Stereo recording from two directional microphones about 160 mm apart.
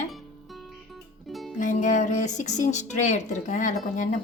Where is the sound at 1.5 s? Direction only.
55° left (ahead or behind).